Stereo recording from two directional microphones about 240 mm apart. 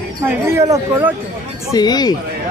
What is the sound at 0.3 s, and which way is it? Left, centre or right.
Speech, centre.